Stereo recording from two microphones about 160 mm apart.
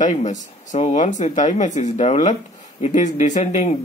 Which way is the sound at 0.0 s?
50° left (ahead or behind).